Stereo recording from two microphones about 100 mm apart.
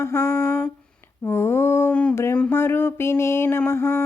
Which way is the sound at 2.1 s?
25° left (ahead or behind).